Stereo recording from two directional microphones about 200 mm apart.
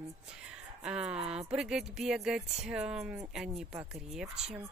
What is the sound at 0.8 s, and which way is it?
Speech, 5° right (ahead or behind).